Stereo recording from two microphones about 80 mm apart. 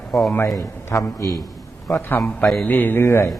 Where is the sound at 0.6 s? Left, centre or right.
Left.